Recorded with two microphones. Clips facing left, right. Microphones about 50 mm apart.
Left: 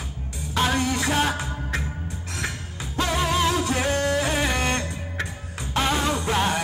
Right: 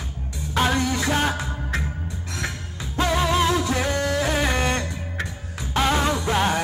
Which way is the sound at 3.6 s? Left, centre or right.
Left.